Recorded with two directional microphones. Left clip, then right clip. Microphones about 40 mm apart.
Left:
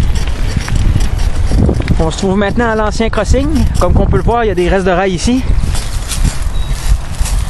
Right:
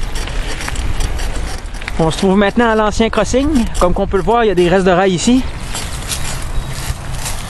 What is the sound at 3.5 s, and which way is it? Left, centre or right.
Speech, right.